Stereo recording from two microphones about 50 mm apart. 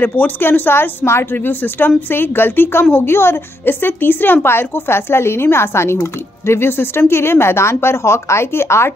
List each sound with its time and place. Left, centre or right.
0.0 s a woman's voice: left
1.3 s a woman's voice: left